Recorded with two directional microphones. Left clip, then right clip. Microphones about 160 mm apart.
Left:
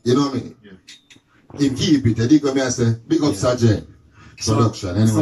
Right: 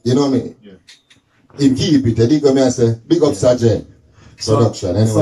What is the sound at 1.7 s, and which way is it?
Speech, 30° right (ahead or behind).